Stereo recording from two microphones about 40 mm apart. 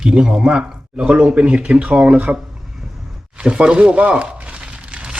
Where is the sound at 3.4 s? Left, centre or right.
Right.